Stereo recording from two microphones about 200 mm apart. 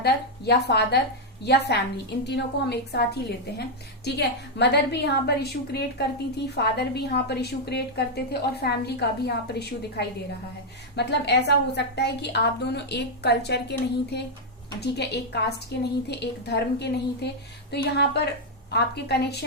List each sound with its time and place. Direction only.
0.0 s a woman's voice: 55° left (ahead or behind)
10.9 s a woman's voice: 55° left (ahead or behind)